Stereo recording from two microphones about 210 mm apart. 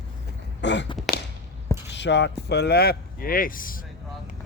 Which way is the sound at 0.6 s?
55° left (ahead or behind).